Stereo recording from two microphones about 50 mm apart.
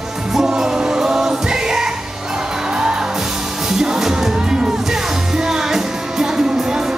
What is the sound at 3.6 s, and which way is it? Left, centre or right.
Music, centre.